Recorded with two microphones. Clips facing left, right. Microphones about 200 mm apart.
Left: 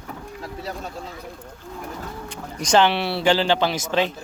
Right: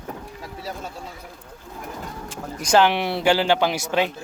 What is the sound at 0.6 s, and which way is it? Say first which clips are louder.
Speech: even; 5° right (ahead or behind).